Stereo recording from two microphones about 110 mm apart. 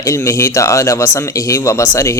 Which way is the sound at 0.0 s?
30° left (ahead or behind).